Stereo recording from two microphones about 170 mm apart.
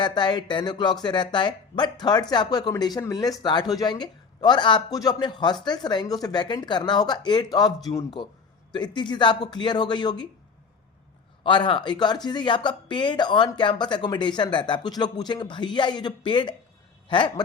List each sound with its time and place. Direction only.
0.0 s speech: 25° left (ahead or behind)
11.4 s speech: 30° left (ahead or behind)